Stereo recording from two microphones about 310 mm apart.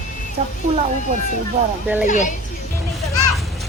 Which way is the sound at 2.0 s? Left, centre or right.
Left.